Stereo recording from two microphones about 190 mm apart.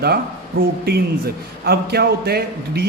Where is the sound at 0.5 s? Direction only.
50° right (ahead or behind).